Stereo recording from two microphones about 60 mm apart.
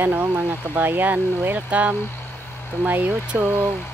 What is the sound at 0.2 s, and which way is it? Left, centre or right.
Speech, right.